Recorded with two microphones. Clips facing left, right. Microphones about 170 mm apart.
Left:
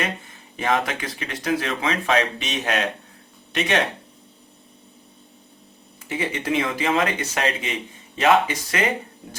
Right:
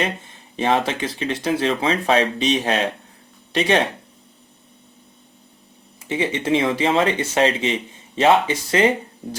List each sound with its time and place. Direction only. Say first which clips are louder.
0.0 s speech: right 3 dB; 30° right (ahead or behind)
6.1 s speech: right 5 dB; 25° right (ahead or behind)